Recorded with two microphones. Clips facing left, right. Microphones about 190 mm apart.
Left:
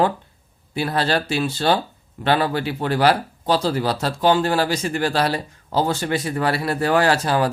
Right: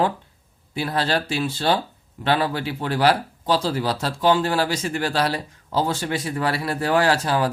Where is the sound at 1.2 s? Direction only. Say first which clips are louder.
Left 2 dB; 55° left (ahead or behind).